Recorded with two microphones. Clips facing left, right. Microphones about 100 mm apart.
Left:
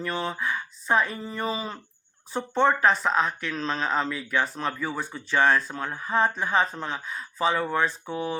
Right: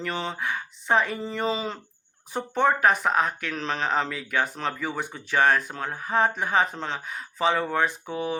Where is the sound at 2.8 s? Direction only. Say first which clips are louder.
Right 1 dB; 60° right (ahead or behind).